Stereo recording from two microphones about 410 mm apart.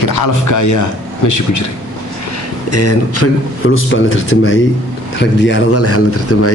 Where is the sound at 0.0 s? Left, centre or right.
Left.